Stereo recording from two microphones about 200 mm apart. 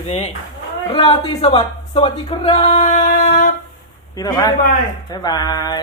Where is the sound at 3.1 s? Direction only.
50° left (ahead or behind).